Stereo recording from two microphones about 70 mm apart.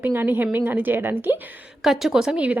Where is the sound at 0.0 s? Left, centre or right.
Right.